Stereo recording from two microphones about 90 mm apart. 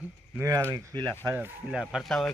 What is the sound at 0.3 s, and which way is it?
A man's voice, 30° right (ahead or behind).